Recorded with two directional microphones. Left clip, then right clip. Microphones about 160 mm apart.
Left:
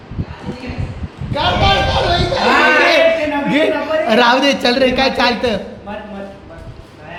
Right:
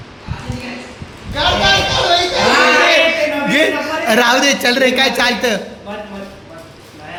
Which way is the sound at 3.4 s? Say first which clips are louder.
Even; 5° left (ahead or behind).